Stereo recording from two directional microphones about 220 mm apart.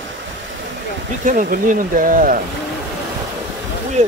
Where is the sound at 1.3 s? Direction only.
35° right (ahead or behind).